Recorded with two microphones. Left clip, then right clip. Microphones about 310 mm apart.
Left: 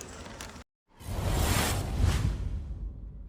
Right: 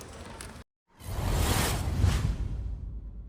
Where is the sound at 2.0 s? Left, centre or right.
Centre.